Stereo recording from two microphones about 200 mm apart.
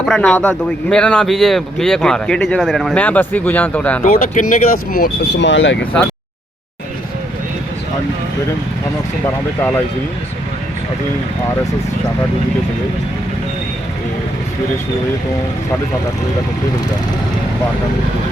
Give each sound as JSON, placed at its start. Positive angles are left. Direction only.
{"t": 0.0, "sound": "speech", "side_deg": 5}
{"t": 4.0, "sound": "speech", "side_deg": 40}